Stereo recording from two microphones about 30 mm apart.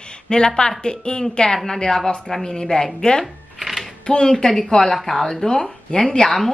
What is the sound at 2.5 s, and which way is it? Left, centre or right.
Speech, left.